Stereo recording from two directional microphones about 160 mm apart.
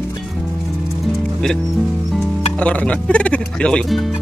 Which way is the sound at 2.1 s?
10° left (ahead or behind).